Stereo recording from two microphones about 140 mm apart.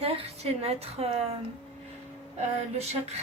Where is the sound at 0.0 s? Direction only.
45° right (ahead or behind).